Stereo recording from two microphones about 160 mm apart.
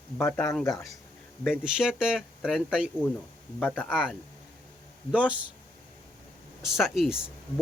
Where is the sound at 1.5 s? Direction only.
5° right (ahead or behind).